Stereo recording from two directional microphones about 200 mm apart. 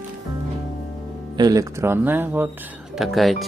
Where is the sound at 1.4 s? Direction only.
15° right (ahead or behind).